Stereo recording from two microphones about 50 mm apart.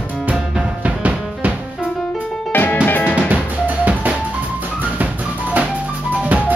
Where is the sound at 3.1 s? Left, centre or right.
Right.